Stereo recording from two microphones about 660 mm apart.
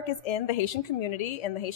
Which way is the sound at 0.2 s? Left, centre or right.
Left.